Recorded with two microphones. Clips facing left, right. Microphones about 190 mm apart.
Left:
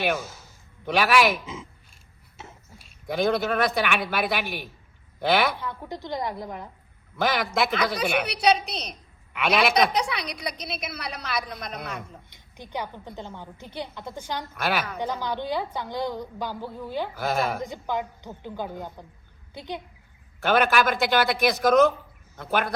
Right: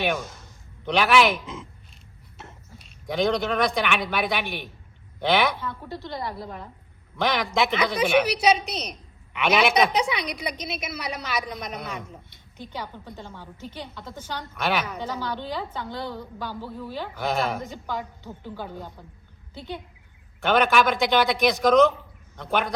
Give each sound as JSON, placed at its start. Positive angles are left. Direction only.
{"t": 0.0, "sound": "speech", "side_deg": 5}
{"t": 5.5, "sound": "a woman's voice", "side_deg": 15}
{"t": 7.2, "sound": "a woman's voice", "side_deg": 0}
{"t": 12.3, "sound": "a woman's voice", "side_deg": 15}
{"t": 14.5, "sound": "speech", "side_deg": 0}
{"t": 14.9, "sound": "a woman's voice", "side_deg": 15}
{"t": 17.2, "sound": "speech", "side_deg": 0}
{"t": 17.6, "sound": "a woman's voice", "side_deg": 15}
{"t": 20.4, "sound": "speech", "side_deg": 0}